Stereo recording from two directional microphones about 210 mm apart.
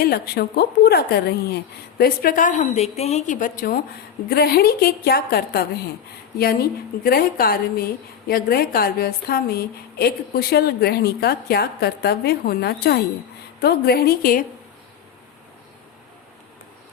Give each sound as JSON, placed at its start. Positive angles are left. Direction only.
{"t": 0.0, "sound": "a woman's voice", "side_deg": 45}
{"t": 4.3, "sound": "a woman's voice", "side_deg": 50}